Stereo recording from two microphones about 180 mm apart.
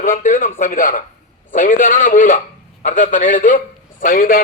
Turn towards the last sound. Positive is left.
turn(degrees=50)  # may be behind; listen again after turning